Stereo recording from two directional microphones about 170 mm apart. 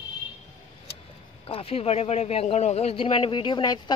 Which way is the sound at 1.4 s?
35° left (ahead or behind).